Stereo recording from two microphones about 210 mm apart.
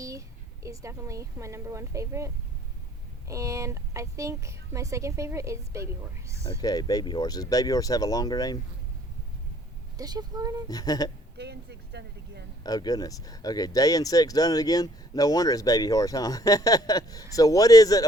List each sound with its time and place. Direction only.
0.0 s a woman's voice: 15° right (ahead or behind)
6.6 s speech: 20° left (ahead or behind)
10.0 s a woman's voice: 20° right (ahead or behind)
10.7 s speech: 20° left (ahead or behind)
11.3 s speech: 50° right (ahead or behind)
12.6 s speech: 20° left (ahead or behind)